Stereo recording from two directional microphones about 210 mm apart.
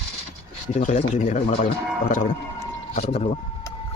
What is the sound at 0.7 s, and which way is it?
Speech, 35° left (ahead or behind).